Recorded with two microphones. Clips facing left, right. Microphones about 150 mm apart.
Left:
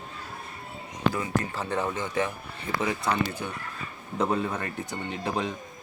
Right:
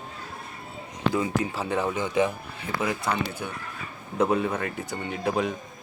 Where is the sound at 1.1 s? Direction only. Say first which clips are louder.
Right 3 dB; 10° right (ahead or behind).